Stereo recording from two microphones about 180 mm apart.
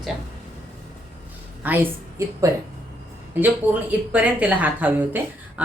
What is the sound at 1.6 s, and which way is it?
Speech, 10° right (ahead or behind).